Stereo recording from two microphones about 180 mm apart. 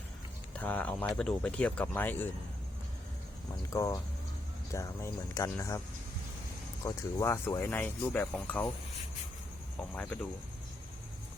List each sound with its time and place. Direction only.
0.5 s speech: 10° left (ahead or behind)
3.5 s speech: 15° left (ahead or behind)
6.8 s speech: 15° left (ahead or behind)
9.9 s speech: 10° left (ahead or behind)